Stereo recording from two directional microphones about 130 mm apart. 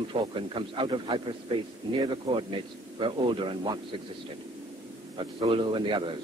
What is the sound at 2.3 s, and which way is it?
Speech, 50° right (ahead or behind).